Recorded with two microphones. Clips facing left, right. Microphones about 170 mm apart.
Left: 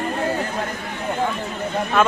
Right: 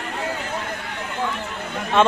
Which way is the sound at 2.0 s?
25° right (ahead or behind).